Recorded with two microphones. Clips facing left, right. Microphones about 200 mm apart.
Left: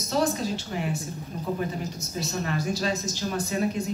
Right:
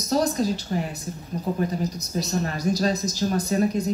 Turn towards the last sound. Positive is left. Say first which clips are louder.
# right 4 dB
turn(degrees=-40)  # may be behind; listen again after turning